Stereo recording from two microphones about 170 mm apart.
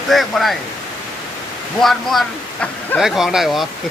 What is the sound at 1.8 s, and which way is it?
Speech, centre (ahead or behind).